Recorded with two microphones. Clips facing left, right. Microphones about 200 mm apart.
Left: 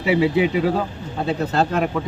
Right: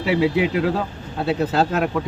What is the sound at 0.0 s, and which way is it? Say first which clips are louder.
Speech: left 1 dB; centre (ahead or behind).